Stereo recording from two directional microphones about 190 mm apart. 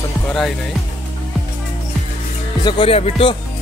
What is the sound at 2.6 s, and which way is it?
Music, 30° left (ahead or behind).